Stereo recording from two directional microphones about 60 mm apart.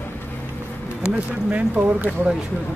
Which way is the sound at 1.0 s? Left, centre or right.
Centre.